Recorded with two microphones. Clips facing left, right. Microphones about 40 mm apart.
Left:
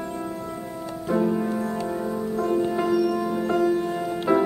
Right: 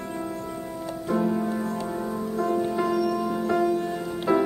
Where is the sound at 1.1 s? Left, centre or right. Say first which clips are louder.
Left 2 dB; centre.